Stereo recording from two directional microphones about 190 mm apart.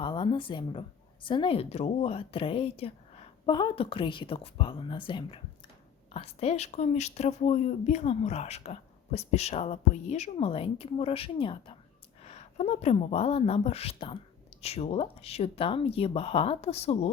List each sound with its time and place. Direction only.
0.0 s a woman's voice: 25° left (ahead or behind)